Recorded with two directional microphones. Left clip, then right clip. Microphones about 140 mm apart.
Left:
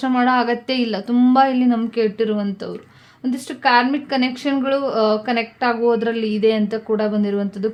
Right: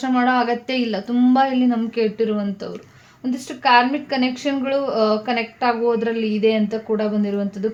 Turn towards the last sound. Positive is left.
turn(degrees=35)  # may be behind; listen again after turning